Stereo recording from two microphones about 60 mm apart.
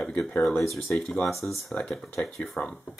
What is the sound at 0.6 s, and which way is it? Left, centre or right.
Speech, centre.